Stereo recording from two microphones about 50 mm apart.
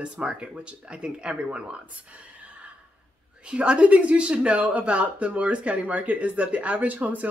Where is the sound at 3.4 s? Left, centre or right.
Right.